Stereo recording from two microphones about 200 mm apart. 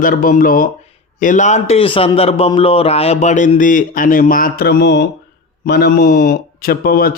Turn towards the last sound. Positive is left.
turn(degrees=50)  # may be behind; listen again after turning